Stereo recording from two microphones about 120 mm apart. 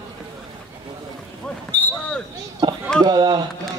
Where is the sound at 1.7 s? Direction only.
15° left (ahead or behind).